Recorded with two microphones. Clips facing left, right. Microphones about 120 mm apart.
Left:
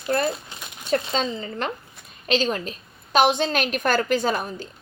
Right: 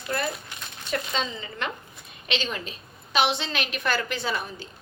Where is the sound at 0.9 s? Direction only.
35° left (ahead or behind).